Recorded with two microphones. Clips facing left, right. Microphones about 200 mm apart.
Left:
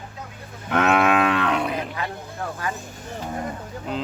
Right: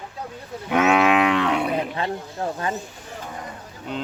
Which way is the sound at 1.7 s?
30° right (ahead or behind).